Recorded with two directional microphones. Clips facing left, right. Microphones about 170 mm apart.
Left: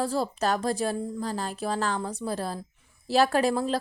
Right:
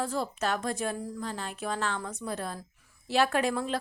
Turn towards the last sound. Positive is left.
turn(degrees=35)  # may be behind; listen again after turning